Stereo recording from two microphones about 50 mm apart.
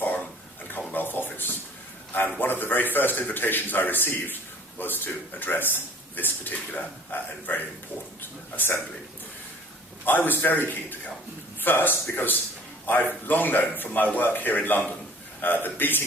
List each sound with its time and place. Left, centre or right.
0.9 s a sound: left
2.4 s a man's voice: left
10.1 s a man's voice: left
11.6 s a man's voice: left